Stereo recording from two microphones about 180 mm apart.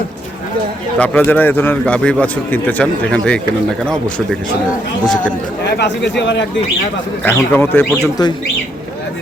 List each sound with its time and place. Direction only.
0.9 s a man's voice: 10° left (ahead or behind)
5.0 s speech: 5° left (ahead or behind)
5.6 s speech: 70° left (ahead or behind)
7.2 s a man's voice: 10° left (ahead or behind)